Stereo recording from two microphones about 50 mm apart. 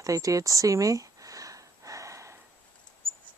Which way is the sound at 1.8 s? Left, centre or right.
Right.